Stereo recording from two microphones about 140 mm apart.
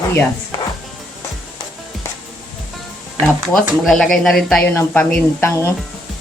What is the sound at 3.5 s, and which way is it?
Speech, 5° left (ahead or behind).